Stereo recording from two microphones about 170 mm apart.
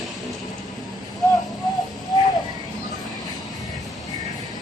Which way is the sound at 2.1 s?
25° left (ahead or behind).